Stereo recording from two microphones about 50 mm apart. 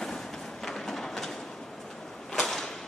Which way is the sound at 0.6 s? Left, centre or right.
Centre.